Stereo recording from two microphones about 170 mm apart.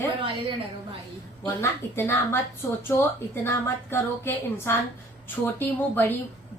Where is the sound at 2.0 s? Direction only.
15° left (ahead or behind).